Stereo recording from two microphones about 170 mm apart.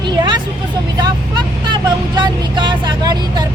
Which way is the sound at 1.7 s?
25° right (ahead or behind).